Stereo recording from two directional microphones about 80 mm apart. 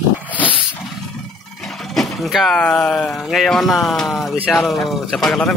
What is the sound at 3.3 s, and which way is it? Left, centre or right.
Speech, centre.